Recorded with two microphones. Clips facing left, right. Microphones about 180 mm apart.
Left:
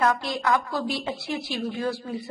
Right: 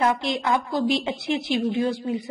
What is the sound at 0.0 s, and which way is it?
A woman's voice, 25° right (ahead or behind).